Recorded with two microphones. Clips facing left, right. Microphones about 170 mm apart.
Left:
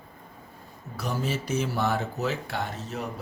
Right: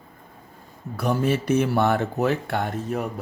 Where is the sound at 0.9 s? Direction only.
55° right (ahead or behind).